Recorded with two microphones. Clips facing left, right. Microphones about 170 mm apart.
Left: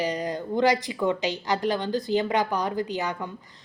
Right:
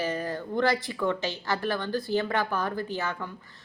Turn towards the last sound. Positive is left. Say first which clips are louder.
# left 3 dB
turn(degrees=15)  # may be behind; listen again after turning